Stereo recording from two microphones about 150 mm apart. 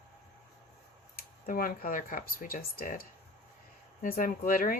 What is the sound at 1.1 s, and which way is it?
Speech, 75° left (ahead or behind).